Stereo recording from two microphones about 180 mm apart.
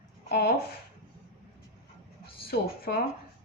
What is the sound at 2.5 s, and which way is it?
Speech, 60° left (ahead or behind).